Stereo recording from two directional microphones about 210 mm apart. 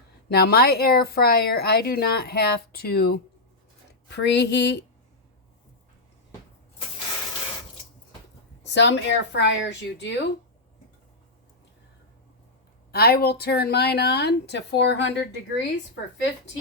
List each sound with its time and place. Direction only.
0.3 s a woman's voice: 50° left (ahead or behind)
8.6 s speech: 55° left (ahead or behind)
12.9 s a woman's voice: 45° left (ahead or behind)